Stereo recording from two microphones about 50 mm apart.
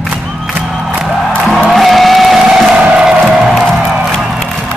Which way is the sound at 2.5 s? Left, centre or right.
Centre.